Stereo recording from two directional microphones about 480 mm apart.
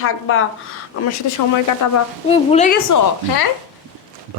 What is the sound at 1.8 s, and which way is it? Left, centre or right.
Speech, left.